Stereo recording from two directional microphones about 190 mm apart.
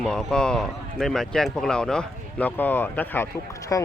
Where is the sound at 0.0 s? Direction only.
5° left (ahead or behind).